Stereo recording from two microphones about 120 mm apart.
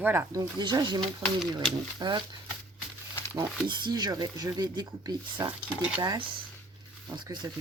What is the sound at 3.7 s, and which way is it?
Speech, 35° right (ahead or behind).